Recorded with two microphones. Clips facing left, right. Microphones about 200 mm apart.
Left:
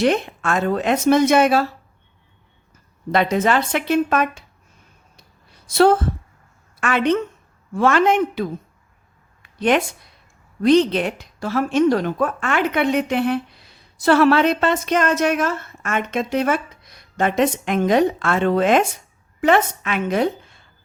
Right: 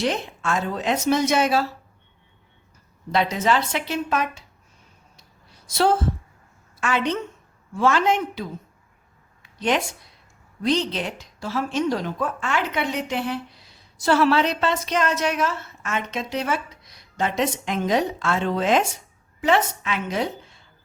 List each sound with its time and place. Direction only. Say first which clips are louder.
0.0 s a woman's voice: left 6 dB; 55° left (ahead or behind)
3.1 s a woman's voice: left 4 dB; 55° left (ahead or behind)
5.6 s a woman's voice: left 6 dB; 55° left (ahead or behind)
9.4 s a sound: left 5 dB; 55° left (ahead or behind)
10.6 s a woman's voice: left 8 dB; 55° left (ahead or behind)